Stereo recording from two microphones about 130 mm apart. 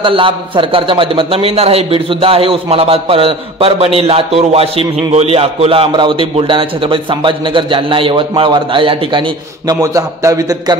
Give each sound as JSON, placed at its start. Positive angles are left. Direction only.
{"t": 0.0, "sound": "a man's voice", "side_deg": -40}
{"t": 9.7, "sound": "a man's voice", "side_deg": -25}